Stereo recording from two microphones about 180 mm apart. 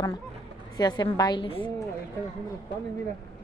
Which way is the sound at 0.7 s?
25° left (ahead or behind).